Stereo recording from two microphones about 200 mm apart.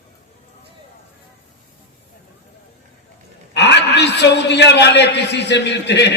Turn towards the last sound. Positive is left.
turn(degrees=60)  # may be behind; listen again after turning